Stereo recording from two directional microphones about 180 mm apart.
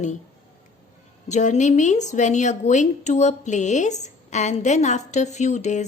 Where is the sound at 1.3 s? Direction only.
40° left (ahead or behind).